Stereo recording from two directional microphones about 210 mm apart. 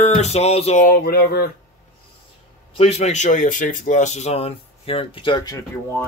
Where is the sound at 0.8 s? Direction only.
45° left (ahead or behind).